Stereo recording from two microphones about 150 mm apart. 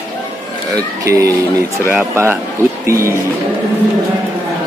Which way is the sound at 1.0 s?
20° right (ahead or behind).